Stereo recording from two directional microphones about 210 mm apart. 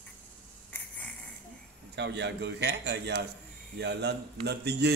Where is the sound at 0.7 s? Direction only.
5° left (ahead or behind).